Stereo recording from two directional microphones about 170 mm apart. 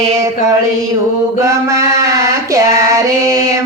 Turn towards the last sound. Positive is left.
turn(degrees=-20)  # may be behind; listen again after turning